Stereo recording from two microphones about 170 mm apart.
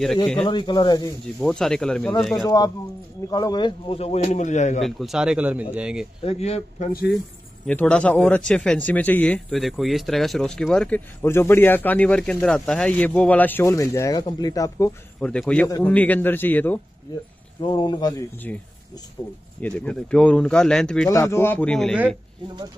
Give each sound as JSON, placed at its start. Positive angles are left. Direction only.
{"t": 0.5, "sound": "speech", "side_deg": 30}
{"t": 1.4, "sound": "speech", "side_deg": 5}
{"t": 3.3, "sound": "speech", "side_deg": 20}
{"t": 4.8, "sound": "speech", "side_deg": 0}
{"t": 6.2, "sound": "speech", "side_deg": 40}
{"t": 7.6, "sound": "speech", "side_deg": 5}
{"t": 15.1, "sound": "speech", "side_deg": 5}
{"t": 17.6, "sound": "speech", "side_deg": 30}
{"t": 18.5, "sound": "speech", "side_deg": 10}
{"t": 19.2, "sound": "speech", "side_deg": 20}
{"t": 19.6, "sound": "speech", "side_deg": 5}